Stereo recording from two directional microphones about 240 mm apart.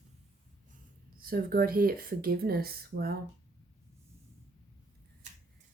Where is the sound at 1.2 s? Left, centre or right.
Right.